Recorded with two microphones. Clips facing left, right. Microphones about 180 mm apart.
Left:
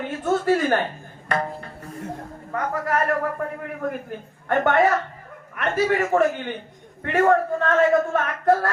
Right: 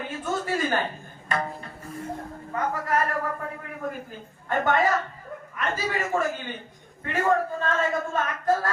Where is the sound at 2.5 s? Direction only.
65° left (ahead or behind).